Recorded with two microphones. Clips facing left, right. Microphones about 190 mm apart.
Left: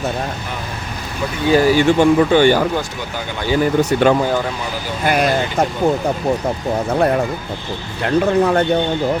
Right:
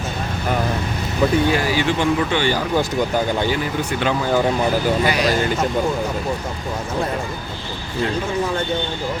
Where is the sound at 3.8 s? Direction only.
45° left (ahead or behind).